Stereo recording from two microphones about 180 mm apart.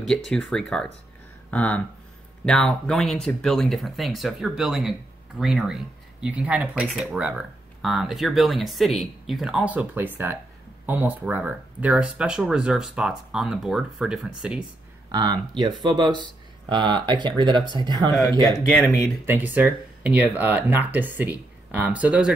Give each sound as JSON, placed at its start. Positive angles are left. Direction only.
{"t": 0.0, "sound": "speech", "side_deg": 0}
{"t": 15.0, "sound": "speech", "side_deg": -25}
{"t": 19.2, "sound": "speech", "side_deg": -10}